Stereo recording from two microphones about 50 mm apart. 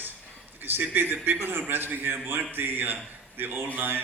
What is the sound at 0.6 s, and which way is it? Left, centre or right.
A man's voice, right.